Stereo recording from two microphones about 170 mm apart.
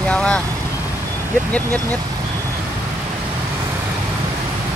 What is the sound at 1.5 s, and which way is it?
Speech, 10° left (ahead or behind).